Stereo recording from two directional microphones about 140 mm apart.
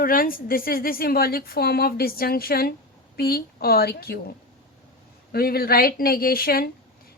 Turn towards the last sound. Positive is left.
turn(degrees=90)